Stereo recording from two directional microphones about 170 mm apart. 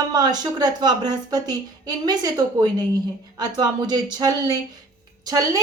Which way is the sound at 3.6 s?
25° right (ahead or behind).